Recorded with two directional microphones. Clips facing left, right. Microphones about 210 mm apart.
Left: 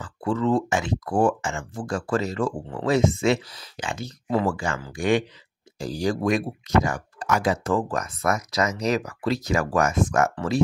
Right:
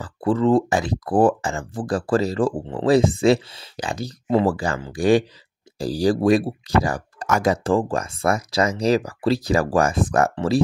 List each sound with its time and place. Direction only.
0.0 s speech: 35° right (ahead or behind)
7.6 s speech: 30° right (ahead or behind)